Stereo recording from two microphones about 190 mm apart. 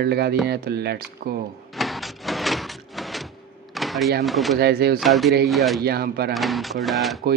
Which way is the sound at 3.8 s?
Centre (ahead or behind).